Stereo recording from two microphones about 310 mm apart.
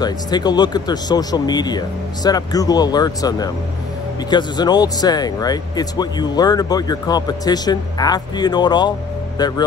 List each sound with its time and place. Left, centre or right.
0.0 s speech: centre